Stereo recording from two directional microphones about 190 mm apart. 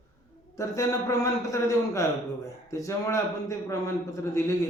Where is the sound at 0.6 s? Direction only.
15° left (ahead or behind).